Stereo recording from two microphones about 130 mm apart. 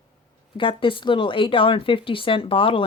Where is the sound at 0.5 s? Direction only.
40° left (ahead or behind).